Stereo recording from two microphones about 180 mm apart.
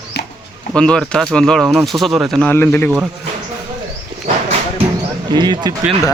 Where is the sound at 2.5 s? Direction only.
10° left (ahead or behind).